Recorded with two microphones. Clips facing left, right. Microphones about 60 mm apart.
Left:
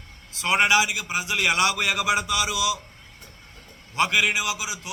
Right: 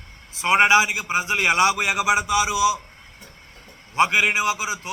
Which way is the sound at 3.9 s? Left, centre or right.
Right.